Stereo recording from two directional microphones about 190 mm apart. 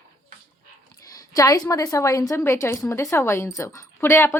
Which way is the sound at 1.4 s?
20° left (ahead or behind).